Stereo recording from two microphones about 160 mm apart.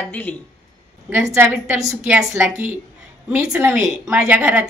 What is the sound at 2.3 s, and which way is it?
A woman's voice, 15° right (ahead or behind).